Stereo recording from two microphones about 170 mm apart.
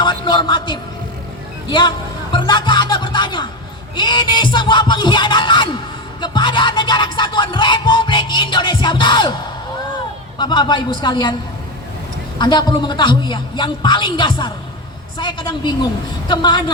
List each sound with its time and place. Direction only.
0.0 s a sound: 25° left (ahead or behind)
1.6 s speech: 25° left (ahead or behind)
2.3 s music: 25° left (ahead or behind)
10.3 s music: 25° left (ahead or behind)
12.4 s music: 25° left (ahead or behind)